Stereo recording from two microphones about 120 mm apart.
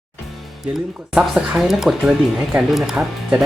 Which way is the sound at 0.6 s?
5° right (ahead or behind).